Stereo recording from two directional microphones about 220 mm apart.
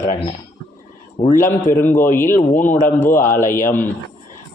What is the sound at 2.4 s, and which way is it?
Speech, 35° left (ahead or behind).